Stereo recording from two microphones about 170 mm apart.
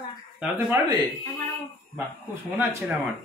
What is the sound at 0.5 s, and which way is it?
Speech, 20° right (ahead or behind).